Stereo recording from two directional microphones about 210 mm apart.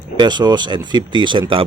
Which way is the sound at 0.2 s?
20° right (ahead or behind).